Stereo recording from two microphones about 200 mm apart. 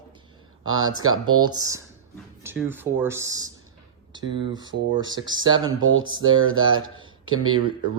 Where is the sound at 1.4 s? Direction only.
20° right (ahead or behind).